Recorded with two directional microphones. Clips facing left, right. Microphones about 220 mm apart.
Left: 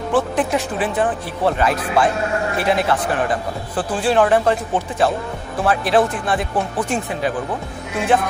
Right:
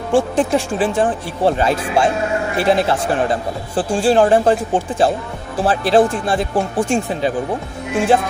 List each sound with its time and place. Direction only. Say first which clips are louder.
0.1 s a man's voice: right 4 dB; 30° right (ahead or behind)